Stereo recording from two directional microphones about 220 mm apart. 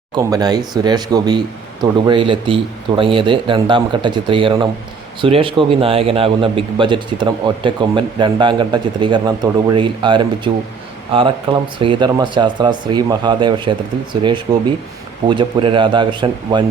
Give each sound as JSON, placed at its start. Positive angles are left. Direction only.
{"t": 0.1, "sound": "a man's voice", "side_deg": -15}